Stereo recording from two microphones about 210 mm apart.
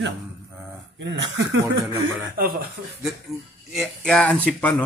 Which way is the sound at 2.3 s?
45° right (ahead or behind).